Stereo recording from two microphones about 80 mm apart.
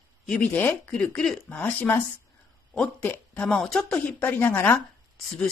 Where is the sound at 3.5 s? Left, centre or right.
Centre; by 4.8 s left.